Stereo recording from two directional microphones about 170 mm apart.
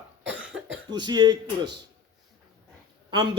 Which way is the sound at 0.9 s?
25° right (ahead or behind).